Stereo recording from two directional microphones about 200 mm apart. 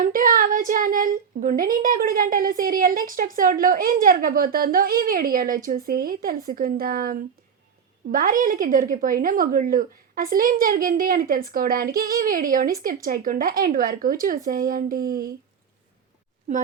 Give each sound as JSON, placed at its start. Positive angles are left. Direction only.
{"t": 0.0, "sound": "speech", "side_deg": -45}